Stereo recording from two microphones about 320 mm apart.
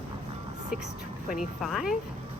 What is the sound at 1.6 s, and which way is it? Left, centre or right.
Speech, centre.